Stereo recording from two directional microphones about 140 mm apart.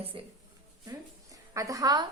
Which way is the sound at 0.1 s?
40° right (ahead or behind).